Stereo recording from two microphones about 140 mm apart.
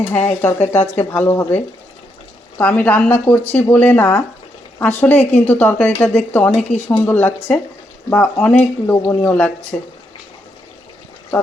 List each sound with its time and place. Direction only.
0.0 s a woman's voice: 10° left (ahead or behind)